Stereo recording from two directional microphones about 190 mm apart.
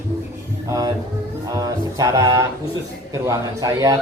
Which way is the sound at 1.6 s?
15° right (ahead or behind).